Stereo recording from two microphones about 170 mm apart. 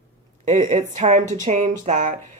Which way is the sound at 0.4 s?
45° right (ahead or behind).